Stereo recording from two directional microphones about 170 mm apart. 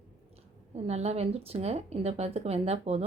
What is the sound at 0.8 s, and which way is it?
Speech, 40° right (ahead or behind).